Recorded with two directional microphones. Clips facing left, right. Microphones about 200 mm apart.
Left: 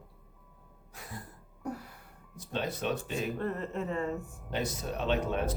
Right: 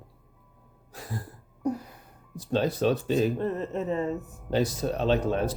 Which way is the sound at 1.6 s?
15° right (ahead or behind).